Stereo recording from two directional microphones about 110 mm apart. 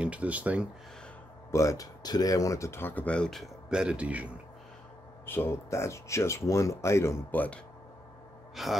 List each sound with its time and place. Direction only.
0.0 s speech: 10° right (ahead or behind)
1.5 s speech: 30° left (ahead or behind); by 3.4 s 5° left (ahead or behind)
3.7 s speech: 10° right (ahead or behind)
5.2 s speech: 20° left (ahead or behind)
8.6 s speech: centre (ahead or behind)